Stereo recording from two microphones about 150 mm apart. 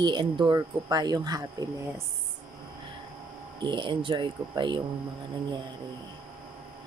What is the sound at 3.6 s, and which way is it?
Speech, 30° right (ahead or behind).